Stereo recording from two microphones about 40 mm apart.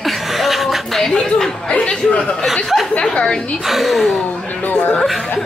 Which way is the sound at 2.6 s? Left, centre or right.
Centre.